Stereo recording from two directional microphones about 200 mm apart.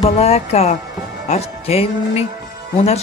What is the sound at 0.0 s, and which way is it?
Speech, 30° left (ahead or behind).